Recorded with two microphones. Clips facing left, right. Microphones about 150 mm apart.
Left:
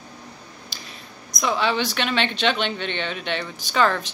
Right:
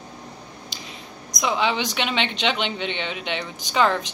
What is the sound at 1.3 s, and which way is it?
A woman's voice, 15° right (ahead or behind).